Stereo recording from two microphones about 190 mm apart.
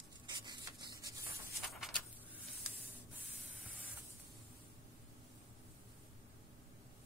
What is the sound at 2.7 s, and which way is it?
Spray, 5° right (ahead or behind).